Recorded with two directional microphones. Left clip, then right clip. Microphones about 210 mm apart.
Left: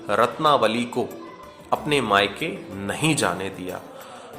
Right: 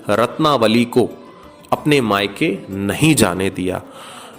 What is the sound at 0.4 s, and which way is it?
A man's voice, 35° right (ahead or behind).